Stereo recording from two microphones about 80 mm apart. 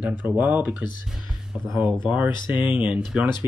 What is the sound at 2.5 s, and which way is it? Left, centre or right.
Speech, centre.